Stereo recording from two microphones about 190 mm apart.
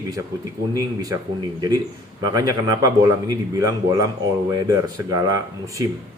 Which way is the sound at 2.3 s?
20° right (ahead or behind).